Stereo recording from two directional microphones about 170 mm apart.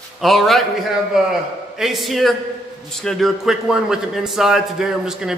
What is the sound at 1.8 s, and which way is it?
A man's voice, centre (ahead or behind).